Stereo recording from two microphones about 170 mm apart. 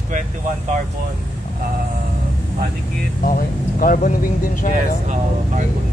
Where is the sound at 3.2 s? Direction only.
55° left (ahead or behind).